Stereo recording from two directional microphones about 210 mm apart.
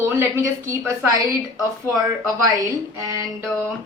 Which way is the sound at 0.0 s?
15° right (ahead or behind).